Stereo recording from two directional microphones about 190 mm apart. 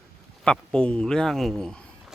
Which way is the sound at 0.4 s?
5° left (ahead or behind).